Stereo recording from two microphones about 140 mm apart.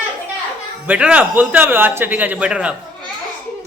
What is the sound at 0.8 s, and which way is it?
Speech, 10° right (ahead or behind).